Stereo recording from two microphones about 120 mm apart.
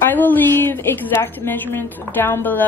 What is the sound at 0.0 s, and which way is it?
A woman's voice, 15° left (ahead or behind).